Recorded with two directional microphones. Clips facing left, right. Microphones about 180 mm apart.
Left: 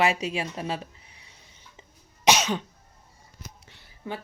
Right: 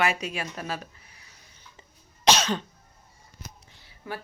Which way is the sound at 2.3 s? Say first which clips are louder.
Left 1 dB; 15° left (ahead or behind).